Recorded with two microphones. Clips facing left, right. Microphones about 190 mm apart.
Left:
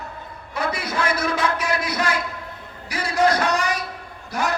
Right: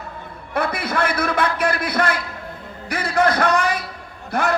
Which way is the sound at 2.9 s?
55° right (ahead or behind).